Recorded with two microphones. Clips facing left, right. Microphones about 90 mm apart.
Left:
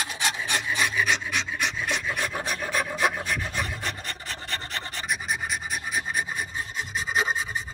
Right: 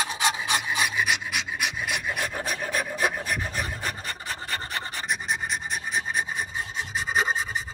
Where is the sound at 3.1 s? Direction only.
10° right (ahead or behind).